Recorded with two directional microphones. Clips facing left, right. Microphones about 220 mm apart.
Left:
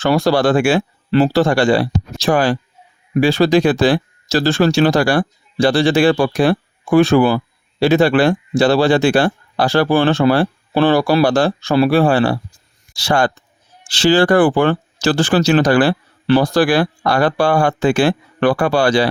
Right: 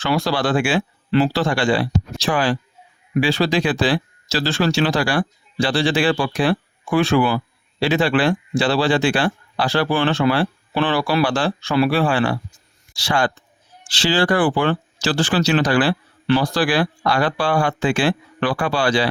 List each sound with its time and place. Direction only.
0.0 s speech: 45° left (ahead or behind)